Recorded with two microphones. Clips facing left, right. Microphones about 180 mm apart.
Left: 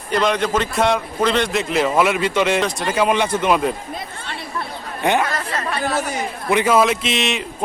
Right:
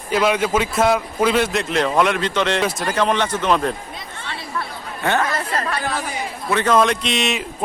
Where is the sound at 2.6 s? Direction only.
Centre (ahead or behind).